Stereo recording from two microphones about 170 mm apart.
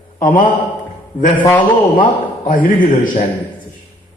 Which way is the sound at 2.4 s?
55° left (ahead or behind).